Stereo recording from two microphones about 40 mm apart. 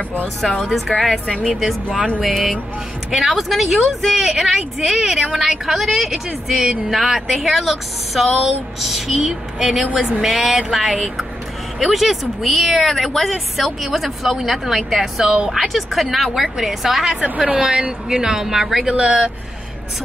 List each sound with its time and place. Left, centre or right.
0.7 s a woman's voice: centre
2.0 s speech: right
2.2 s a woman's voice: centre
11.8 s a woman's voice: centre
15.2 s speech: right
15.5 s a woman's voice: centre
17.2 s a woman's voice: right; by 18.9 s centre
18.9 s speech: right